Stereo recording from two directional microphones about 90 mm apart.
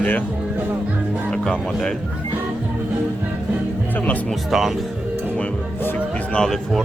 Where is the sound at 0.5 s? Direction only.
20° right (ahead or behind).